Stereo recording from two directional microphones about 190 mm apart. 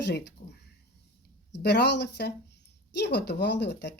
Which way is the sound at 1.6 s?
60° left (ahead or behind).